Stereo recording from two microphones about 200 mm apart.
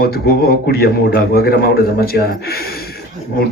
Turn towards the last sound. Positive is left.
turn(degrees=50)  # may be behind; listen again after turning